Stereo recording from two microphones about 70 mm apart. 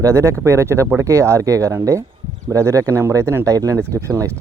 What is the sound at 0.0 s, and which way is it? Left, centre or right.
Speech, right.